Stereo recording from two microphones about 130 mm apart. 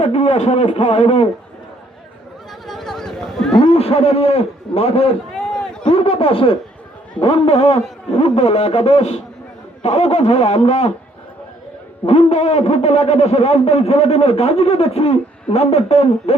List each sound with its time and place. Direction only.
0.0 s speech: 45° left (ahead or behind)
2.6 s a sound: centre (ahead or behind)
3.6 s a man's voice: 50° left (ahead or behind)
5.3 s run: 5° left (ahead or behind)
5.9 s a man's voice: 45° left (ahead or behind)
12.0 s speech: 55° left (ahead or behind)